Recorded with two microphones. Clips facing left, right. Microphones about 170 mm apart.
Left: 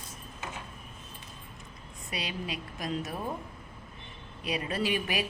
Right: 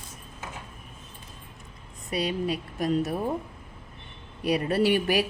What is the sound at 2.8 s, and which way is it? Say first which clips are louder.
Speech: right 8 dB; 35° right (ahead or behind).